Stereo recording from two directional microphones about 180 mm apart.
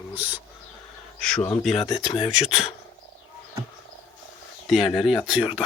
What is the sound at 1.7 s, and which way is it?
Speech, 35° left (ahead or behind).